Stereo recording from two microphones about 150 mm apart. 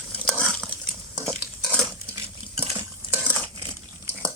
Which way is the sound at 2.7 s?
15° right (ahead or behind).